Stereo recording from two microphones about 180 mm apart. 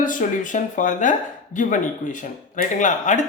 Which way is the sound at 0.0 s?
45° left (ahead or behind).